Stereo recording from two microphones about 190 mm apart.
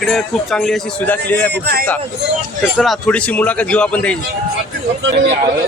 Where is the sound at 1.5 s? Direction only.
55° right (ahead or behind).